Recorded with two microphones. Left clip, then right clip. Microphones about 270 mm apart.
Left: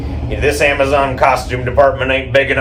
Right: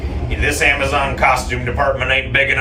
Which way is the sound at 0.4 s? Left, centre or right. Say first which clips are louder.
Left 3 dB; centre.